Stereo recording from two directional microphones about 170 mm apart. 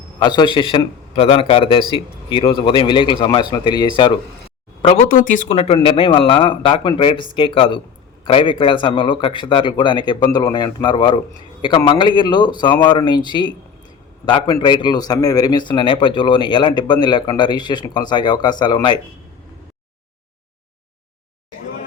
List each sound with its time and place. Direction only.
0.2 s a man's voice: 25° left (ahead or behind)
5.0 s a man's voice: 55° left (ahead or behind); by 18.9 s 25° left (ahead or behind)